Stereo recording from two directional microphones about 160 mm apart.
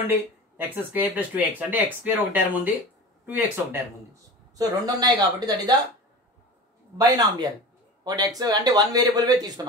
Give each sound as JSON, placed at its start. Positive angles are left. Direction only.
{"t": 0.6, "sound": "speech", "side_deg": -10}
{"t": 4.6, "sound": "speech", "side_deg": -25}
{"t": 7.0, "sound": "speech", "side_deg": -25}